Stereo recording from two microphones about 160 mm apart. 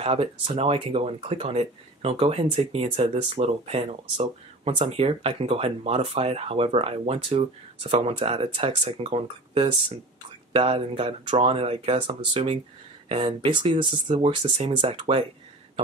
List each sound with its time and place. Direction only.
0.0 s speech: 35° right (ahead or behind)